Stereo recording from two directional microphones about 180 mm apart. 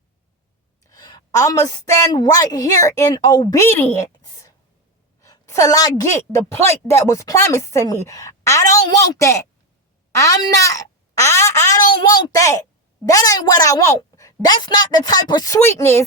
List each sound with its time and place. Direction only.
0.9 s a woman's voice: 20° left (ahead or behind)
10.2 s a sound: 20° left (ahead or behind)
11.9 s a woman's voice: 20° left (ahead or behind)